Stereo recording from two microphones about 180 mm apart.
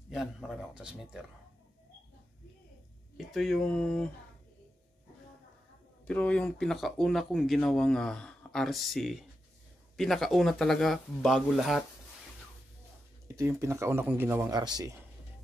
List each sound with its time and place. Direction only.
0.1 s speech: centre (ahead or behind)
3.2 s speech: centre (ahead or behind)
6.0 s speech: 5° left (ahead or behind)
13.4 s a man's voice: 15° right (ahead or behind)